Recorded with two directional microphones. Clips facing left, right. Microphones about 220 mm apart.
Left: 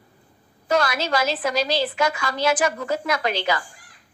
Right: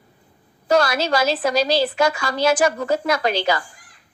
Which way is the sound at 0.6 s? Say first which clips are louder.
Right 4 dB; 35° right (ahead or behind).